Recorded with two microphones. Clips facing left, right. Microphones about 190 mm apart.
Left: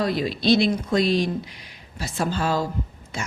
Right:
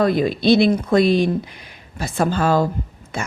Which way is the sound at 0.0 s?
50° right (ahead or behind).